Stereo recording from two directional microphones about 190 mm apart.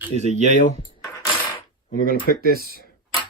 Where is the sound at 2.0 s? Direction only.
50° left (ahead or behind).